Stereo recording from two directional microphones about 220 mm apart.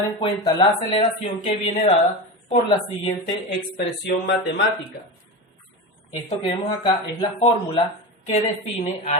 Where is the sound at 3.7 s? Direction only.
50° left (ahead or behind).